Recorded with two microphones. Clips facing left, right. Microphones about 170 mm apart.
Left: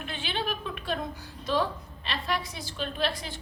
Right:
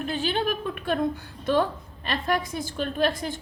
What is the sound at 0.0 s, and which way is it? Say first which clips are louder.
A woman's voice: right 7 dB; 40° right (ahead or behind).